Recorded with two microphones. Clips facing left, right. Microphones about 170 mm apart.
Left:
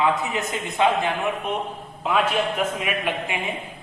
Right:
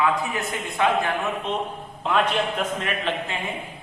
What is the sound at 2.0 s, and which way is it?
A man's voice, 5° left (ahead or behind).